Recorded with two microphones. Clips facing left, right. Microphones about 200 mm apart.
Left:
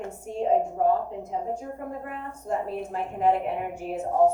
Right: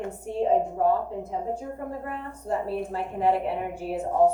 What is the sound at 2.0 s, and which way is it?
A woman's voice, 30° right (ahead or behind).